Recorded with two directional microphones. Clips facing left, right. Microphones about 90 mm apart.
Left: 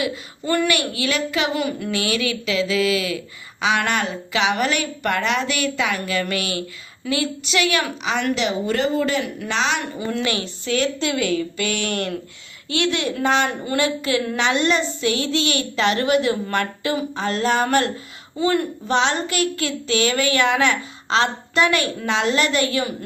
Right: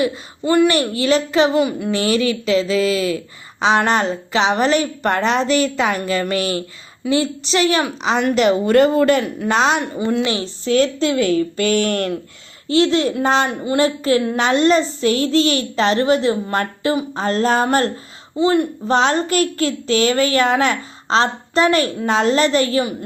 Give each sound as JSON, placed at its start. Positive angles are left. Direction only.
{"t": 0.4, "sound": "a child's voice", "side_deg": -15}
{"t": 0.7, "sound": "a child's voice", "side_deg": -35}
{"t": 9.2, "sound": "a child's voice", "side_deg": -40}
{"t": 10.2, "sound": "a child's voice", "side_deg": -30}
{"t": 18.3, "sound": "speech", "side_deg": -25}
{"t": 18.9, "sound": "a child's voice", "side_deg": -40}